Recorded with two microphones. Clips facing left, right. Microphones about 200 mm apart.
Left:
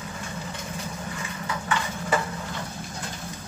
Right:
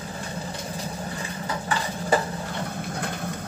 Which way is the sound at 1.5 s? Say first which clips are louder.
Even; 35° right (ahead or behind).